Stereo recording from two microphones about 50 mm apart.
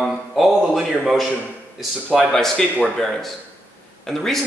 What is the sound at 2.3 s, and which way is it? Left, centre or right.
Speech, centre.